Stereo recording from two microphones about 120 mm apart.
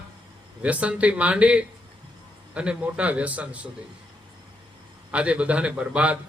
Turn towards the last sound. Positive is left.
turn(degrees=-10)  # may be behind; listen again after turning